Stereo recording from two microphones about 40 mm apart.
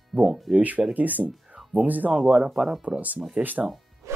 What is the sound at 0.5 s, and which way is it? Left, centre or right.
Speech, right.